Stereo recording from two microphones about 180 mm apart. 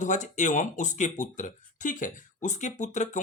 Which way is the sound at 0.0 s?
40° left (ahead or behind).